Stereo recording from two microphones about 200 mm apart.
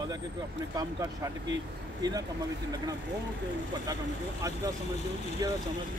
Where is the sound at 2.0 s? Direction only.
20° right (ahead or behind).